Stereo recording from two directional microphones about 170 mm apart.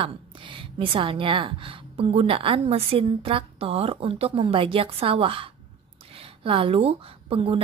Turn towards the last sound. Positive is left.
turn(degrees=-35)  # may be behind; listen again after turning